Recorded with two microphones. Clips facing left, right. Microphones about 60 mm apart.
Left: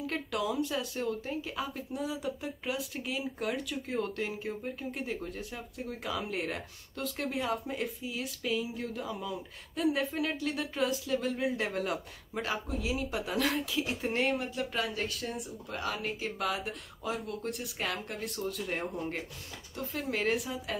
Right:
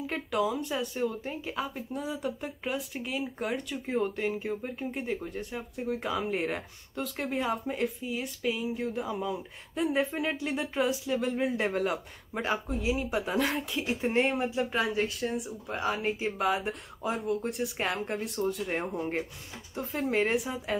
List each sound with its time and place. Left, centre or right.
0.0 s speech: centre
8.8 s speech: centre
9.1 s speech: centre; by 11.6 s right
11.6 s speech: centre
14.5 s speech: right
14.8 s speech: right
15.7 s speech: centre
16.4 s speech: centre
17.8 s speech: right
18.7 s speech: centre